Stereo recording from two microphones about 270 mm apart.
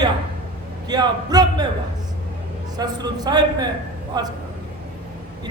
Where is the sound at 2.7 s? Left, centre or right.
Centre.